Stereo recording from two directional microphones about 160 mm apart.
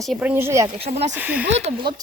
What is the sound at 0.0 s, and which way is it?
Speech, 5° right (ahead or behind).